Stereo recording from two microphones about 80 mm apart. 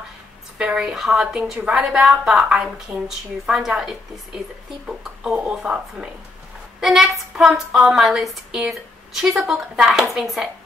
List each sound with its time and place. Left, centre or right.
0.6 s a woman's voice: centre